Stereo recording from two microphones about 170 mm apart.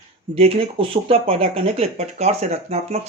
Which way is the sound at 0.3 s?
35° right (ahead or behind).